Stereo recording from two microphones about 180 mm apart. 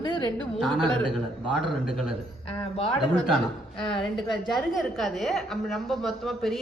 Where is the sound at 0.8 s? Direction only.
25° right (ahead or behind).